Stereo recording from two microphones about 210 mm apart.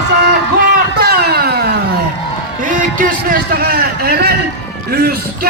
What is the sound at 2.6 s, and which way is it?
A man's voice, 40° right (ahead or behind).